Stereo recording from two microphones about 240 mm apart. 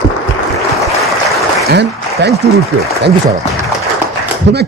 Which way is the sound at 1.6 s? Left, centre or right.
Right.